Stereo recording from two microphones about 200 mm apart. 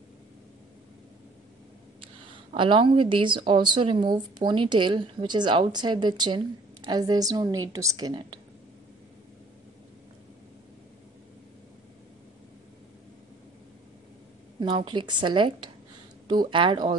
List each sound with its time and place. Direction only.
2.5 s speech: 25° right (ahead or behind)
14.6 s speech: 25° right (ahead or behind)